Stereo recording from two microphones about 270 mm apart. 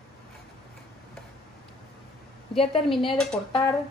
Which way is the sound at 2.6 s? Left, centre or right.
Centre.